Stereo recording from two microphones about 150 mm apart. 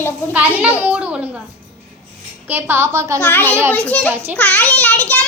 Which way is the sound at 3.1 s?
15° left (ahead or behind).